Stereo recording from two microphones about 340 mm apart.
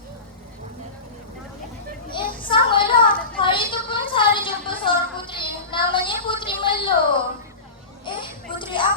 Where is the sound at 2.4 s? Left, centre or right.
Centre.